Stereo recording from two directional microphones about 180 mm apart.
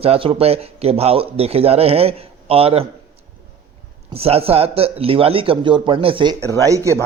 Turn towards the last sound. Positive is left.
turn(degrees=-15)  # may be behind; listen again after turning